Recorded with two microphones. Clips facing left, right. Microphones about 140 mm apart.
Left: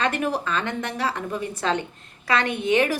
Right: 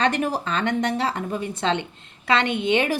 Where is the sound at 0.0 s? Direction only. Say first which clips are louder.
Right 2 dB; 25° right (ahead or behind).